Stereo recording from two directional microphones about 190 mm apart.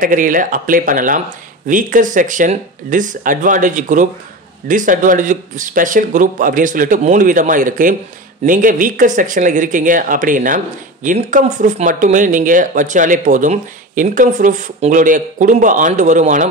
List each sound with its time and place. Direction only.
0.0 s speech: 45° right (ahead or behind)